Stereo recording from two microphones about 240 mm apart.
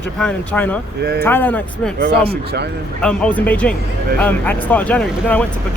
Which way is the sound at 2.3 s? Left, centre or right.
Right.